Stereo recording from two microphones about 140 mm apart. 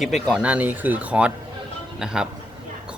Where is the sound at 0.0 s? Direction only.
Centre (ahead or behind).